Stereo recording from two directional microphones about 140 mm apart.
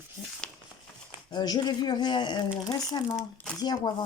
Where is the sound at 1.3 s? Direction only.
30° left (ahead or behind).